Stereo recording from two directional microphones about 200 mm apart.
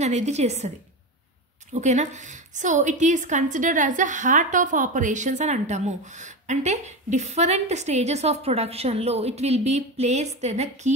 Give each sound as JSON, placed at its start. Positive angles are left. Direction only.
{"t": 0.0, "sound": "a woman's voice", "side_deg": -35}
{"t": 1.7, "sound": "a woman's voice", "side_deg": -35}